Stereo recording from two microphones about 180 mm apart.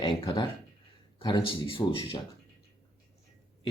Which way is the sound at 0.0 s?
25° left (ahead or behind).